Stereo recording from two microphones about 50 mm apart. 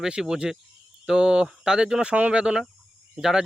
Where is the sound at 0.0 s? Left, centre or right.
Centre.